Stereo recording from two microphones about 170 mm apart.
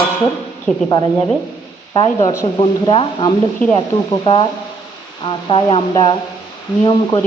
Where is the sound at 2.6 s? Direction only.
30° left (ahead or behind).